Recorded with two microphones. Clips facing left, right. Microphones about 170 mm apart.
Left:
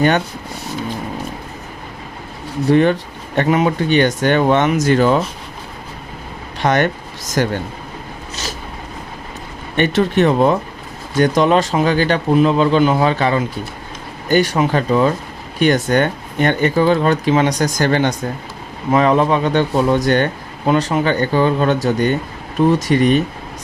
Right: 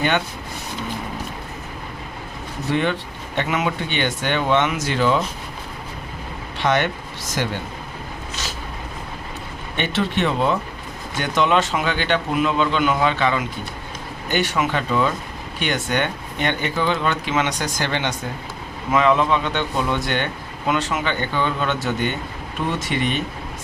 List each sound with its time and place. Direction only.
2.6 s speech: 40° left (ahead or behind)
6.6 s speech: 45° left (ahead or behind)
9.7 s speech: 45° left (ahead or behind)